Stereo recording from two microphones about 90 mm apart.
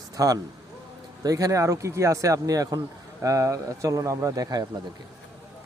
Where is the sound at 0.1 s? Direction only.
40° right (ahead or behind).